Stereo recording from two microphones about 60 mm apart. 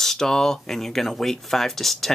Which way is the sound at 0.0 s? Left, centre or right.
Centre.